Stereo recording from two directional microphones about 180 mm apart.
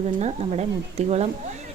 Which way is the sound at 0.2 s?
35° right (ahead or behind).